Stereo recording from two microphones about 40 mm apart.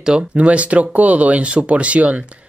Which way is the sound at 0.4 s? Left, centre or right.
Right.